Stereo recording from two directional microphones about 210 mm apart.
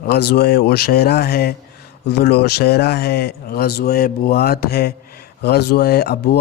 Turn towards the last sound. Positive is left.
turn(degrees=50)  # may be behind; listen again after turning